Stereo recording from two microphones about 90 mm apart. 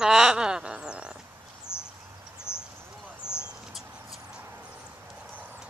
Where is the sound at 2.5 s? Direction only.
25° left (ahead or behind).